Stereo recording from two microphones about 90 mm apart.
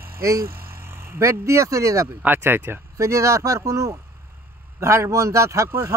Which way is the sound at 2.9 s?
35° right (ahead or behind).